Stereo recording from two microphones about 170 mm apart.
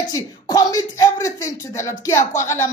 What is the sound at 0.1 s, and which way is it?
Speech, 20° left (ahead or behind).